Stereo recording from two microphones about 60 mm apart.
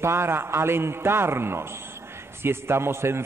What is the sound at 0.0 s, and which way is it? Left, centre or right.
A man's voice, right.